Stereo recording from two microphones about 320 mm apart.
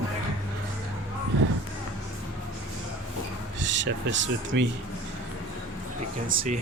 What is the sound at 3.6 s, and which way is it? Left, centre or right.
Speech, right.